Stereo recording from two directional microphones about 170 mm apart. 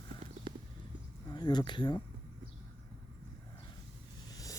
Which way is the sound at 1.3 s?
25° left (ahead or behind).